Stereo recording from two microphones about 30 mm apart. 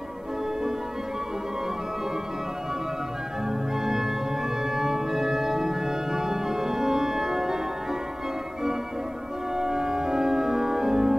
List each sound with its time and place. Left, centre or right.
3.8 s music: centre
4.7 s organ: centre
9.6 s organ: centre